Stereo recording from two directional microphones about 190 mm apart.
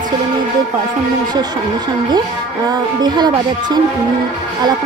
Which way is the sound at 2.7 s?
20° right (ahead or behind).